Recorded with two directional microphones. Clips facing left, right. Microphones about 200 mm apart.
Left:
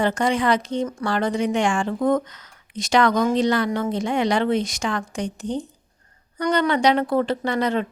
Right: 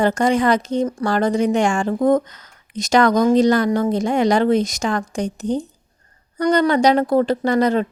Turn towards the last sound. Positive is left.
turn(degrees=-40)  # may be behind; listen again after turning